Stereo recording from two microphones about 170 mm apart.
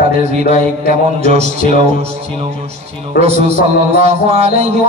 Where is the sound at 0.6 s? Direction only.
40° right (ahead or behind).